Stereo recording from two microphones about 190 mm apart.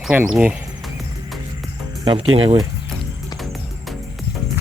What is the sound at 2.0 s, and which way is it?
Speech, 25° right (ahead or behind).